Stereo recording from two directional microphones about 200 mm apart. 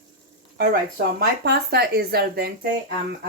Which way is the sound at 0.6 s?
50° right (ahead or behind).